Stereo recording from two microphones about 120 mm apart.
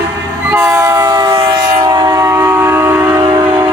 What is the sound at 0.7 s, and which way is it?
Train, 25° right (ahead or behind).